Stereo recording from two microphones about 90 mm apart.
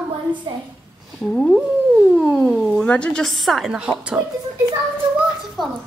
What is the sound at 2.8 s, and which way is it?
A woman's voice, 15° left (ahead or behind).